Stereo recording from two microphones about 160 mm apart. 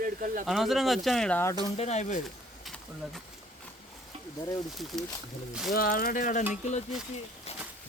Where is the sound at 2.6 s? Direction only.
Centre (ahead or behind).